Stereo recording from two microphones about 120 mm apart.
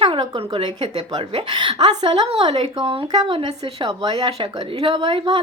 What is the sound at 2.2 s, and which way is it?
Speech, 55° right (ahead or behind).